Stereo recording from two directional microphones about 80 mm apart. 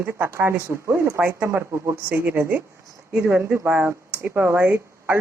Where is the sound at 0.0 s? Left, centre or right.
Right.